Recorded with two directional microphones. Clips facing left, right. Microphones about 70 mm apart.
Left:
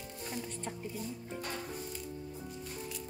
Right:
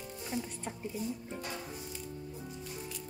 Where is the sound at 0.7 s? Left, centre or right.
Centre.